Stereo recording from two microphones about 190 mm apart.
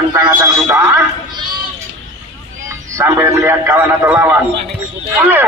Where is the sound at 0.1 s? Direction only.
20° right (ahead or behind).